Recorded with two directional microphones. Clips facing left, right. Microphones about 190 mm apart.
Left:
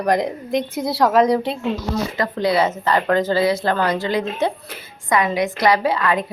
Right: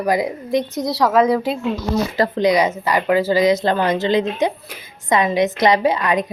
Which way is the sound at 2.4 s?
15° right (ahead or behind).